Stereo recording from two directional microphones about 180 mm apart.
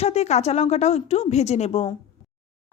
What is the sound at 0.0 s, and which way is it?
Speech, 35° left (ahead or behind).